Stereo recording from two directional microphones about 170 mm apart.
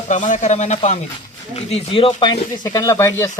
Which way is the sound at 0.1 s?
45° left (ahead or behind).